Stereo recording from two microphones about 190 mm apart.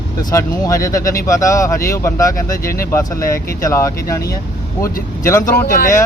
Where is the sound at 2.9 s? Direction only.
15° left (ahead or behind).